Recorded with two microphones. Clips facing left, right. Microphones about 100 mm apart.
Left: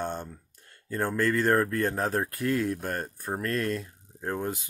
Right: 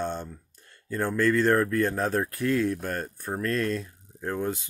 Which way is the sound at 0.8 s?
35° left (ahead or behind).